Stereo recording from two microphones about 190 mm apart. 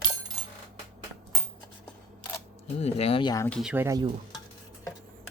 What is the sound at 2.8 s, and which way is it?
Speech, 30° left (ahead or behind).